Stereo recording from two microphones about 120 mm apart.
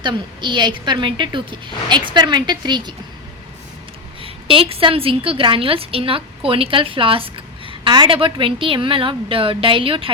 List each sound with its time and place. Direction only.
0.0 s a woman's voice: 40° right (ahead or behind)
4.2 s a woman's voice: 50° right (ahead or behind)